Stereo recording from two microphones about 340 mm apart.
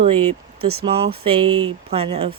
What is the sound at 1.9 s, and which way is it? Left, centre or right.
Speech, centre.